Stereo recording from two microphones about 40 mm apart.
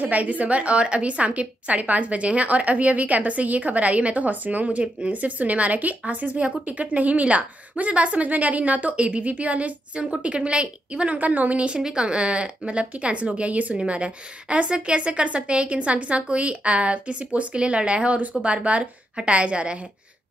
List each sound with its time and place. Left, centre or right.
0.0 s a woman's voice: right
11.1 s a woman's voice: right
11.7 s a woman's voice: right